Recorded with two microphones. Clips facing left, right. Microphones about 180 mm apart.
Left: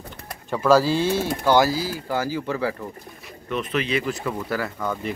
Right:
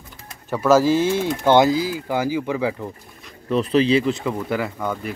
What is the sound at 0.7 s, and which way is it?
Speech, 10° right (ahead or behind).